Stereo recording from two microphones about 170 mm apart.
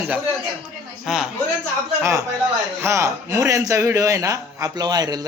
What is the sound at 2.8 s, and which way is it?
A man's voice, 15° right (ahead or behind).